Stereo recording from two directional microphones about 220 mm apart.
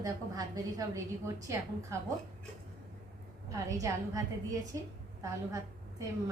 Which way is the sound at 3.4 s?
15° right (ahead or behind).